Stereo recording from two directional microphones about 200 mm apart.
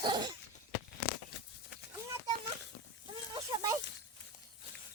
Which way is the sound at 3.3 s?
20° right (ahead or behind).